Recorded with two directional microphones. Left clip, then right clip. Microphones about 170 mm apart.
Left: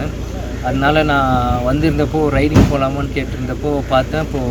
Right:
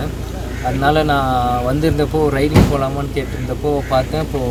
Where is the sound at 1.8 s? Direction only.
5° left (ahead or behind).